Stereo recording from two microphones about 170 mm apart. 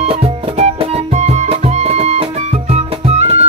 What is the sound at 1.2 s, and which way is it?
Music, 40° right (ahead or behind).